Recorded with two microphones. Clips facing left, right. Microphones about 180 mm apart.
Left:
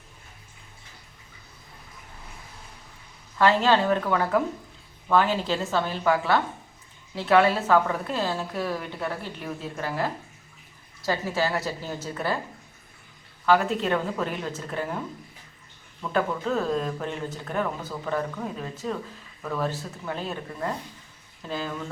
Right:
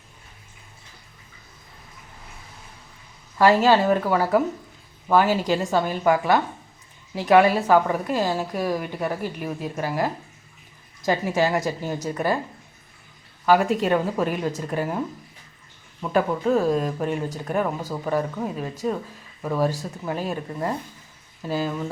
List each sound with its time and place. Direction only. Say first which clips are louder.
3.3 s a woman's voice: right 4 dB; 10° right (ahead or behind)
13.4 s a woman's voice: right 3 dB; 10° right (ahead or behind)
16.1 s a woman's voice: right 5 dB; 10° right (ahead or behind)